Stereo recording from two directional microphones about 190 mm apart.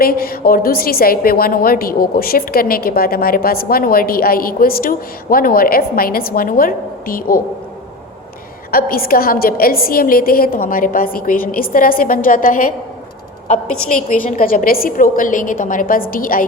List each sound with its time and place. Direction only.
0.0 s a woman's voice: 50° left (ahead or behind)
8.7 s a woman's voice: 50° left (ahead or behind)
13.9 s a woman's voice: 45° left (ahead or behind)